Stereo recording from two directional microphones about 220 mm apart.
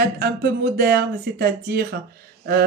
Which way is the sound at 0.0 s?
45° right (ahead or behind).